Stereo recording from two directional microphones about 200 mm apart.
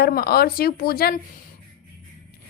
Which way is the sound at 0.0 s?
50° left (ahead or behind).